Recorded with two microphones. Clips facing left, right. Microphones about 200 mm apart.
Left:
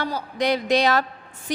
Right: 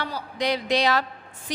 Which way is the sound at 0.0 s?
45° left (ahead or behind).